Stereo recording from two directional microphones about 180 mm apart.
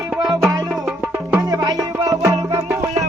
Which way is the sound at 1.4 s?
20° right (ahead or behind).